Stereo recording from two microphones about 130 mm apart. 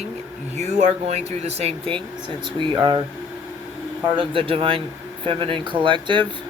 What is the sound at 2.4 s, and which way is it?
Speech, 35° right (ahead or behind).